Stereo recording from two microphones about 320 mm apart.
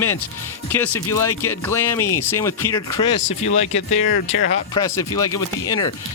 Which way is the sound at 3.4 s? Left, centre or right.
Left.